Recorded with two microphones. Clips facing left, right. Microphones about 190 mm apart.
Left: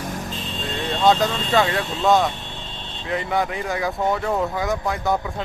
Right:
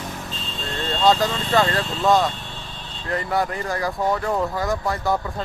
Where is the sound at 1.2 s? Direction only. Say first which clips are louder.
Even; 15° left (ahead or behind).